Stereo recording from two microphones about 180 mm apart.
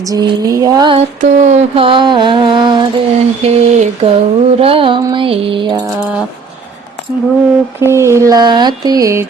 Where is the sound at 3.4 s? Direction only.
35° right (ahead or behind).